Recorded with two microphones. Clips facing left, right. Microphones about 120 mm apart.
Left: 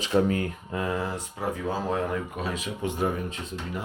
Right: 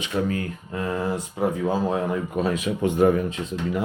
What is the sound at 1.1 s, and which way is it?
Speech, 20° right (ahead or behind).